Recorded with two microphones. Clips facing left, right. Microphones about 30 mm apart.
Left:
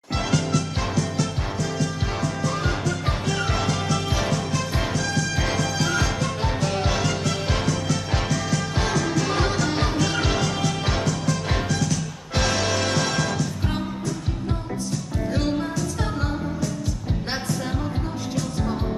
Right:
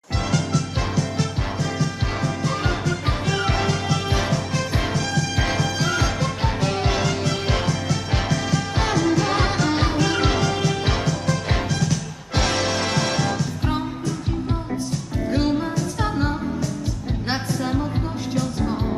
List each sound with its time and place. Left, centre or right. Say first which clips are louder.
3.4 s music: right 2 dB; right
12.5 s music: right 1 dB; centre
15.3 s music: right 4 dB; centre